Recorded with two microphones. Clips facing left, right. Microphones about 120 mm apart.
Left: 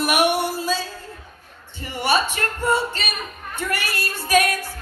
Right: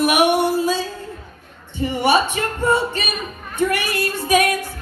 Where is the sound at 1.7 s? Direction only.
20° right (ahead or behind).